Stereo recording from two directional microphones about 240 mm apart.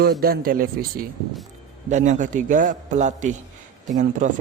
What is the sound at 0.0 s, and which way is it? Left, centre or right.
A man's voice, right.